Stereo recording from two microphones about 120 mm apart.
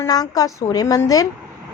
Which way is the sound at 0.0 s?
30° left (ahead or behind).